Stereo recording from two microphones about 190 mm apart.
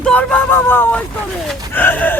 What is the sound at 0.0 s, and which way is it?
Speech, 5° left (ahead or behind).